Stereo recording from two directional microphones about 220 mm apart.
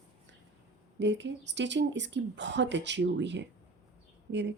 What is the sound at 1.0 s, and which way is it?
Speech, 55° right (ahead or behind).